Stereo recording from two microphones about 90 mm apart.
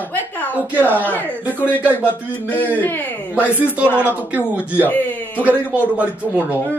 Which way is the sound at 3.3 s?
15° right (ahead or behind).